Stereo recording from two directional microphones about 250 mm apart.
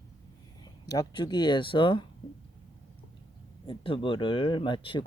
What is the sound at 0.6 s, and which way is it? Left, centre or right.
Speech, centre.